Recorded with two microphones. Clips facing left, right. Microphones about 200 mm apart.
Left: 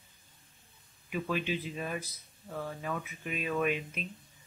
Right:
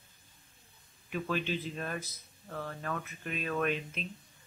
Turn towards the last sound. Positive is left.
turn(degrees=5)  # may be behind; listen again after turning